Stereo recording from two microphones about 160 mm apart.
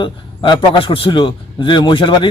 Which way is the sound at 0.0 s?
30° left (ahead or behind).